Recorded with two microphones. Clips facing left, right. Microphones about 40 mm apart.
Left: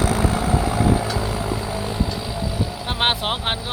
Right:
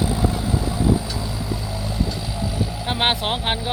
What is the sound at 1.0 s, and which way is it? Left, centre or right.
Vehicle, left.